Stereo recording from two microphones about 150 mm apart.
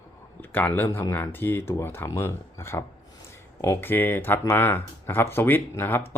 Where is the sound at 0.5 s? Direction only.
10° left (ahead or behind).